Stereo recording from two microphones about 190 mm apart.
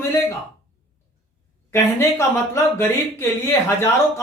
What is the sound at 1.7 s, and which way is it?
Speech, 15° left (ahead or behind).